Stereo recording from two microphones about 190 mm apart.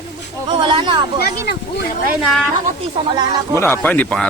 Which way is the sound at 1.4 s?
60° left (ahead or behind).